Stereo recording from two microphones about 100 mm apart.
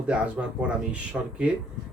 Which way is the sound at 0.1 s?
15° right (ahead or behind).